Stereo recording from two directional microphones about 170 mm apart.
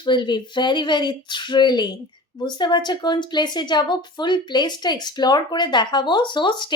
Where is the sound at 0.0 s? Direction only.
25° left (ahead or behind).